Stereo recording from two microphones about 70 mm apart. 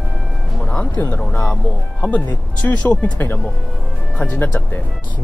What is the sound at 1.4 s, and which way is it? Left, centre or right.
Speech, centre.